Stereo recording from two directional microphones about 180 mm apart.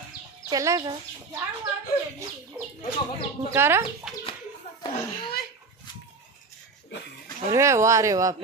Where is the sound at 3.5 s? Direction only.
15° right (ahead or behind).